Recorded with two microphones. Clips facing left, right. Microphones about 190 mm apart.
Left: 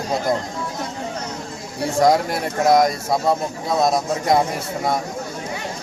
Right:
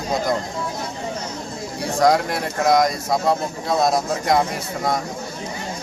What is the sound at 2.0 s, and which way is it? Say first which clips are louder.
Speech: left 1 dB; centre (ahead or behind).